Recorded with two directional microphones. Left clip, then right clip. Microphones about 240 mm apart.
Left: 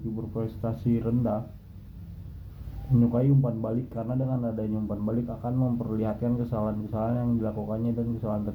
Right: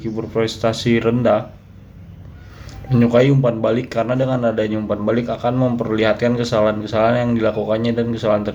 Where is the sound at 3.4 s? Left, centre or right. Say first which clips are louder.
Right 14 dB; right.